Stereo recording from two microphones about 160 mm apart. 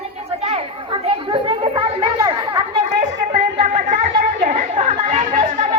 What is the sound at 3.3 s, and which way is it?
Chatter, 45° right (ahead or behind).